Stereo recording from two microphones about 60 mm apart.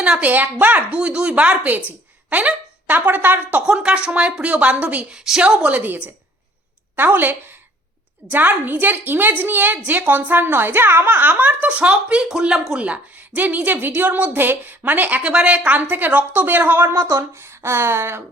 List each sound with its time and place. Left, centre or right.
0.0 s a woman's voice: right
2.3 s a sound: right
2.9 s a woman's voice: right
3.7 s a woman's voice: centre
5.0 s speech: centre
5.4 s a woman's voice: right
12.8 s a woman's voice: right
15.2 s a woman's voice: centre
15.8 s a woman's voice: right
16.9 s speech: right